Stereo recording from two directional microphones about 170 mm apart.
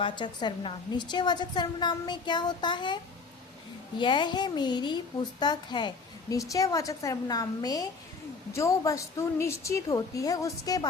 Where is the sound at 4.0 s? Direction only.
30° left (ahead or behind).